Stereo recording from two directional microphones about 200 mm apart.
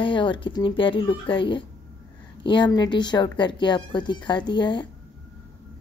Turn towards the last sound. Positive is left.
turn(degrees=25)  # may be behind; listen again after turning